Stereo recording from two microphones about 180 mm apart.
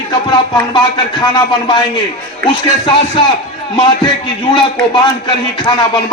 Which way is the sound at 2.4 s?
25° left (ahead or behind).